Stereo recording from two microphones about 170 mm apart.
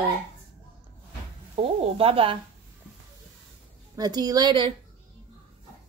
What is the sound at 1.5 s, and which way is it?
Speech, 35° right (ahead or behind).